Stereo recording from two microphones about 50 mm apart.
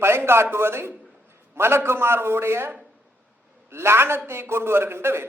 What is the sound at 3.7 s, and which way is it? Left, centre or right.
A man's voice, right.